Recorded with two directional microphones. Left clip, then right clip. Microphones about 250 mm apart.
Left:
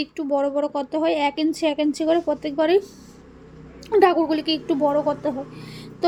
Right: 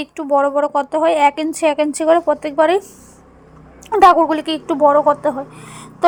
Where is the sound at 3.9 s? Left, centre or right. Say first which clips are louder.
Right 7 dB; centre.